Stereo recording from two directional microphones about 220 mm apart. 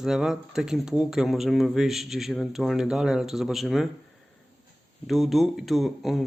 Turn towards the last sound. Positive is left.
turn(degrees=0)  # may be behind; listen again after turning